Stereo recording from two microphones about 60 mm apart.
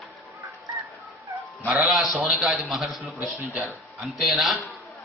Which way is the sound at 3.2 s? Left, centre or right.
Right.